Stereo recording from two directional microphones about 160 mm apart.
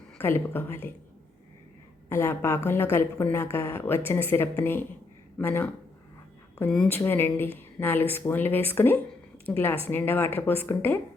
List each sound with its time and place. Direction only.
0.2 s a woman's voice: 15° left (ahead or behind)
2.0 s a woman's voice: 15° left (ahead or behind)